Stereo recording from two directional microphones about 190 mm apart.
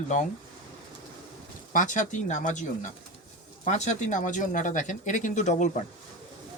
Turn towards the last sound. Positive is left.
turn(degrees=40)  # may be behind; listen again after turning